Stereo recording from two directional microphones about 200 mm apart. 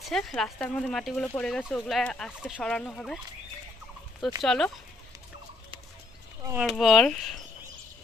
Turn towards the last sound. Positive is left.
turn(degrees=0)  # may be behind; listen again after turning